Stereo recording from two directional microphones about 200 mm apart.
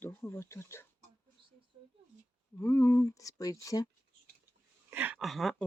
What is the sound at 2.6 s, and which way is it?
Speech, 15° left (ahead or behind).